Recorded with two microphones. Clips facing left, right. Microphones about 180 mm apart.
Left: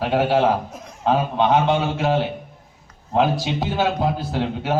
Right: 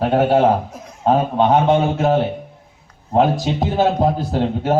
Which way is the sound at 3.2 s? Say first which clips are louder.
Right 3 dB; 45° right (ahead or behind).